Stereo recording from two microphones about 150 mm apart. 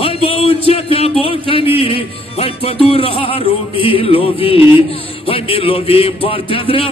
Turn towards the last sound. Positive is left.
turn(degrees=40)  # may be behind; listen again after turning